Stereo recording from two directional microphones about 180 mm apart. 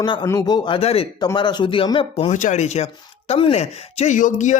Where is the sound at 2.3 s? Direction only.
40° left (ahead or behind).